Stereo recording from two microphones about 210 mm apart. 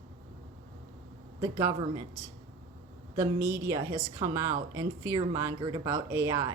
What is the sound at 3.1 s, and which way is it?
Speech, 15° right (ahead or behind).